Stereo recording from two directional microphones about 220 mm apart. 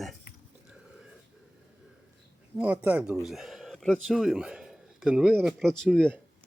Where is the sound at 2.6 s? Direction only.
5° right (ahead or behind).